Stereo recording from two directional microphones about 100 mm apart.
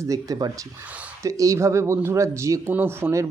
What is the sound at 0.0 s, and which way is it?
Speech, 35° right (ahead or behind).